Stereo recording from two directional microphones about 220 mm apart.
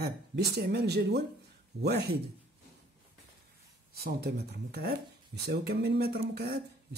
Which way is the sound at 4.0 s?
45° right (ahead or behind).